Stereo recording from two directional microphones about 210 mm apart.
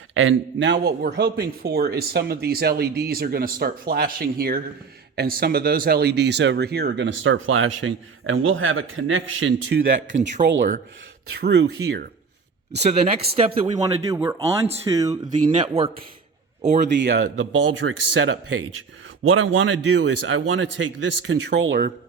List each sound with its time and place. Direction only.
0.1 s a man's voice: 70° right (ahead or behind)
9.7 s speech: 55° right (ahead or behind)
10.4 s speech: 25° right (ahead or behind)
11.4 s a man's voice: 55° right (ahead or behind)
12.8 s speech: 30° right (ahead or behind)
13.7 s a man's voice: 15° right (ahead or behind); by 16.8 s 35° right (ahead or behind)
17.0 s speech: 55° right (ahead or behind)